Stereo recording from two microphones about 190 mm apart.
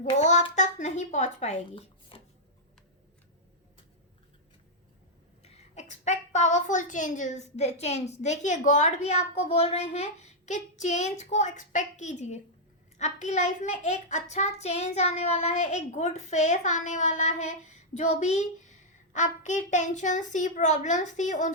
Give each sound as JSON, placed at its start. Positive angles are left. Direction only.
{"t": 0.0, "sound": "a sound", "side_deg": 35}
{"t": 0.5, "sound": "a woman's voice", "side_deg": 40}
{"t": 5.4, "sound": "a woman's voice", "side_deg": 35}